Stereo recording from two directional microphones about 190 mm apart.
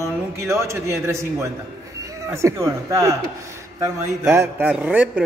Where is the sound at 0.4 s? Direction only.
15° right (ahead or behind).